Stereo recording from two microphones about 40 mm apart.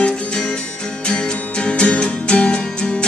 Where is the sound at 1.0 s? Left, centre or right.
Left.